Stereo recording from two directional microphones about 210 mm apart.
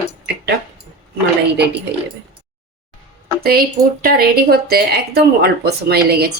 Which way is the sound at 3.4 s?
45° right (ahead or behind).